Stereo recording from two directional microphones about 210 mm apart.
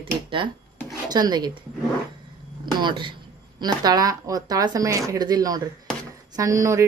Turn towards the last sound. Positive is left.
turn(degrees=-15)  # may be behind; listen again after turning